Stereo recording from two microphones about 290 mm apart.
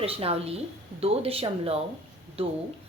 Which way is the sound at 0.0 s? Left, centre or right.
Centre.